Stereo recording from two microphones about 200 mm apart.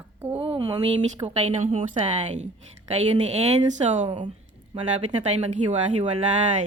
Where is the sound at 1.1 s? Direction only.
35° right (ahead or behind).